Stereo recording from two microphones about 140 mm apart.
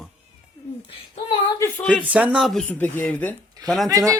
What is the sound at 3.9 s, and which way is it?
Speech, 25° right (ahead or behind).